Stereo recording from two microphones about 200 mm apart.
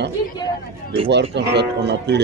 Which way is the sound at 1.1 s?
60° right (ahead or behind).